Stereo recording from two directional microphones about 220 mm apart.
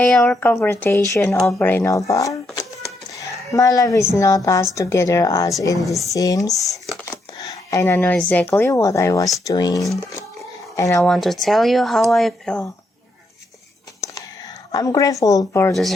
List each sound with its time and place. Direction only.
0.0 s speech: centre (ahead or behind)
3.2 s a sound: 15° left (ahead or behind)
4.1 s speech: 15° left (ahead or behind)
11.1 s speech: centre (ahead or behind)
14.0 s whispering: 15° left (ahead or behind)
14.7 s speech: 15° left (ahead or behind)